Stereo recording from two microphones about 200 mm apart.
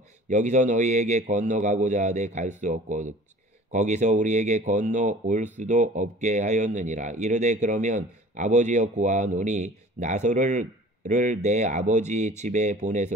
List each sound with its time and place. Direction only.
0.3 s speech: 35° right (ahead or behind)